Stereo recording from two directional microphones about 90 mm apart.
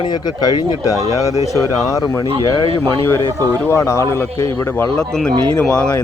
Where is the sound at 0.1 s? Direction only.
45° left (ahead or behind).